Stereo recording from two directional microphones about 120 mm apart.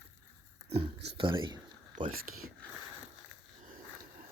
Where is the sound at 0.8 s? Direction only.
50° right (ahead or behind).